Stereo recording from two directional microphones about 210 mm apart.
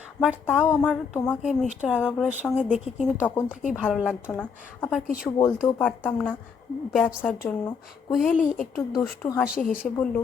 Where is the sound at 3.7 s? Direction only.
5° left (ahead or behind).